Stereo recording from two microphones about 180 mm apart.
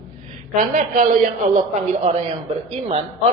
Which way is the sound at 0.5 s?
45° right (ahead or behind).